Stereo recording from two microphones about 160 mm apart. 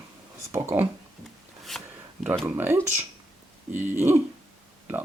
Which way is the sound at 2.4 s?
15° right (ahead or behind).